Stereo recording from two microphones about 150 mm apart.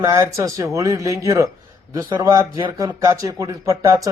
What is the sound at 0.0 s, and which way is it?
Speech, 20° right (ahead or behind).